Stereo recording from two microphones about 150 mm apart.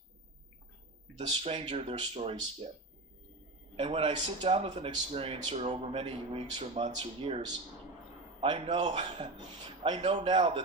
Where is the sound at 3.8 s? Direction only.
40° right (ahead or behind).